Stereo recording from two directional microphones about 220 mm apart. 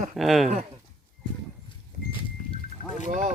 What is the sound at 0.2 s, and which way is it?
Speech, centre (ahead or behind).